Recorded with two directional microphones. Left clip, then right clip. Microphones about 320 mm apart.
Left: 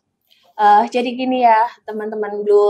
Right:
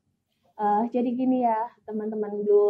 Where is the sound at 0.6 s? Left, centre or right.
Centre.